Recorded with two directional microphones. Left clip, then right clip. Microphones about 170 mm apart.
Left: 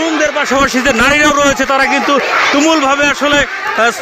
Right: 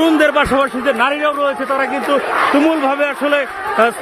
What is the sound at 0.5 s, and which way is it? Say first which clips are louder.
Speech: left 4 dB; 15° left (ahead or behind).